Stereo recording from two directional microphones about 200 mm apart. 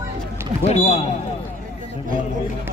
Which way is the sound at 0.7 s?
30° left (ahead or behind).